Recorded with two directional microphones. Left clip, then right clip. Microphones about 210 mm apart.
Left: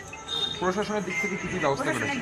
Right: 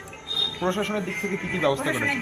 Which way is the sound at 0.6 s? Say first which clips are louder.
Right 1 dB; 55° right (ahead or behind).